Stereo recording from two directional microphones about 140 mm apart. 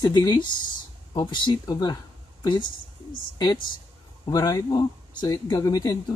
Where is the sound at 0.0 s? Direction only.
30° left (ahead or behind).